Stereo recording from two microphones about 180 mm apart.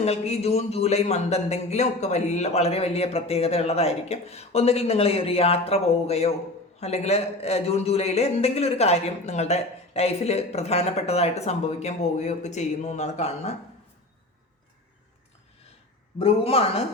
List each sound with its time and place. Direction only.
0.0 s a man's voice: 35° left (ahead or behind)
16.1 s a man's voice: 35° left (ahead or behind)